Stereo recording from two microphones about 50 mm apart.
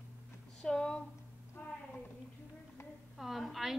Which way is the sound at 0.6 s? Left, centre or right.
Centre.